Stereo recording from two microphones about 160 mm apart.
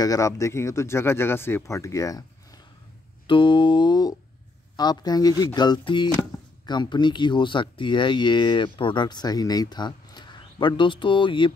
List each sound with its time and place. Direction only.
0.0 s speech: 20° left (ahead or behind)
3.3 s speech: 30° left (ahead or behind)